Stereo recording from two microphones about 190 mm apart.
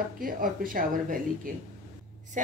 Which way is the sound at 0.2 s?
45° right (ahead or behind).